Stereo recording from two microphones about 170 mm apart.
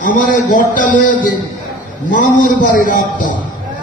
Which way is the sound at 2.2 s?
50° left (ahead or behind).